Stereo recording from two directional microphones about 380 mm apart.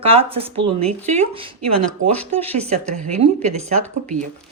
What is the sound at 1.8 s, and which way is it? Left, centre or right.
Speech, right.